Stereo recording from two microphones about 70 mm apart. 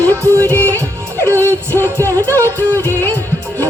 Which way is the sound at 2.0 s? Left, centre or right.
Right.